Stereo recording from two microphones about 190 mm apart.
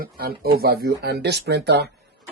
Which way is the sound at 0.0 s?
50° right (ahead or behind).